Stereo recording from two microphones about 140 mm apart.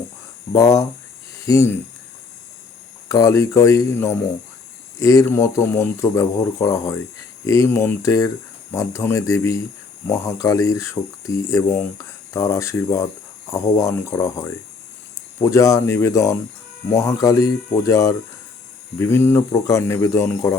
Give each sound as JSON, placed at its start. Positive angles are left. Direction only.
{"t": 0.5, "sound": "speech", "side_deg": 25}
{"t": 3.1, "sound": "speech", "side_deg": 25}